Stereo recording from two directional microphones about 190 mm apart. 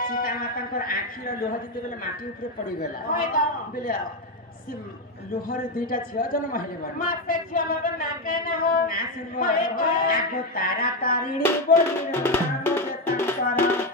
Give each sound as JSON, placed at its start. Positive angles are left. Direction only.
{"t": 0.0, "sound": "a sound", "side_deg": 50}
{"t": 2.8, "sound": "a man's voice", "side_deg": 45}
{"t": 5.5, "sound": "a man's voice", "side_deg": 45}
{"t": 12.1, "sound": "music", "side_deg": 10}